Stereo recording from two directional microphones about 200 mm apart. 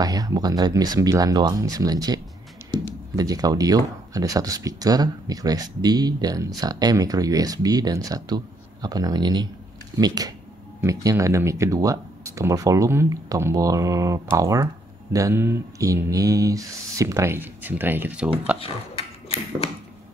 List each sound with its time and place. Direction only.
0.0 s speech: 20° right (ahead or behind)
3.2 s speech: 20° right (ahead or behind)
18.6 s speech: 30° left (ahead or behind)